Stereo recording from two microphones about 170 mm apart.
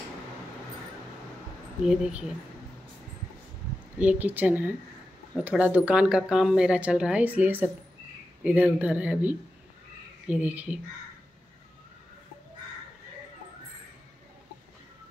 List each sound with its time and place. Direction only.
1.8 s speech: 5° right (ahead or behind)
4.0 s speech: 10° right (ahead or behind)